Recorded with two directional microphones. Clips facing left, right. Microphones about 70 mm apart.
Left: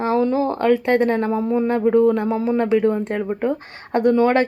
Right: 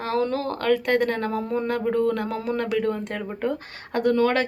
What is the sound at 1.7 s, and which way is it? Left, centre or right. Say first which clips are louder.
Speech: left 7 dB; left.